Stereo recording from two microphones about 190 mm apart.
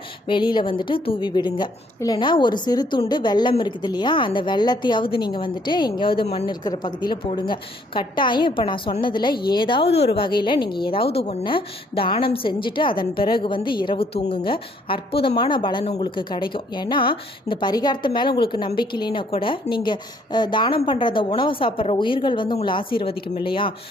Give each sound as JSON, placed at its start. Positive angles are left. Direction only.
{"t": 0.3, "sound": "a woman's voice", "side_deg": 25}